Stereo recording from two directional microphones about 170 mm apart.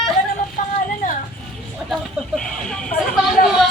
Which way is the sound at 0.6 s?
50° left (ahead or behind).